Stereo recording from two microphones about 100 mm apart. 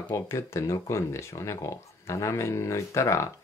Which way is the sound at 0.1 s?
30° left (ahead or behind).